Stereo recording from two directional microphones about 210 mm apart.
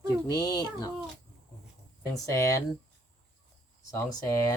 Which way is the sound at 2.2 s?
15° left (ahead or behind).